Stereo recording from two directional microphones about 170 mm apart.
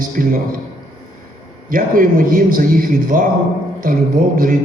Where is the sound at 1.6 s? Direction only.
55° right (ahead or behind).